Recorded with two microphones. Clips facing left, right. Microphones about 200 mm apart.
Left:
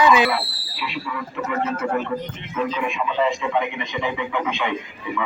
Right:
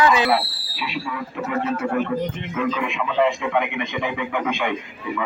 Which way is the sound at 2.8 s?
60° right (ahead or behind).